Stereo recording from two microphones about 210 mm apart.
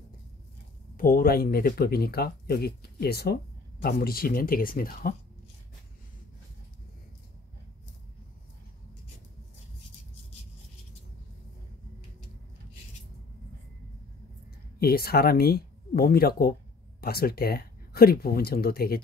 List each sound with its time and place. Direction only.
0.9 s speech: 45° left (ahead or behind)
14.8 s speech: 45° left (ahead or behind)